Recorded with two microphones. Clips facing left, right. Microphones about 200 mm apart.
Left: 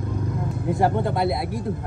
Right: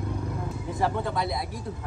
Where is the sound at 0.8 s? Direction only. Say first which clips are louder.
Left 5 dB; 55° left (ahead or behind).